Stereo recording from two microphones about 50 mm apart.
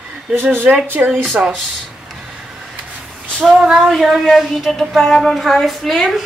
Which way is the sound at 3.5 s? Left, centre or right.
Centre.